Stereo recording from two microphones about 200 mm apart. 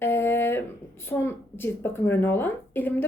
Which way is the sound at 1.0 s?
10° left (ahead or behind).